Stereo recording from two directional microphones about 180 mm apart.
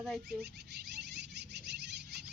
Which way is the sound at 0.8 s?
70° right (ahead or behind).